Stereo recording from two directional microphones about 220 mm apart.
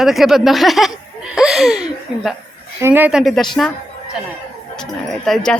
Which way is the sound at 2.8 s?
10° right (ahead or behind).